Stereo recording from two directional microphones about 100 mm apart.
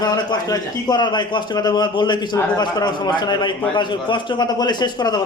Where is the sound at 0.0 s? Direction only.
40° left (ahead or behind).